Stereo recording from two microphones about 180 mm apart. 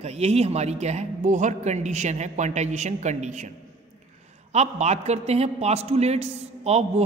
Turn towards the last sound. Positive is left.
turn(degrees=-35)  # may be behind; listen again after turning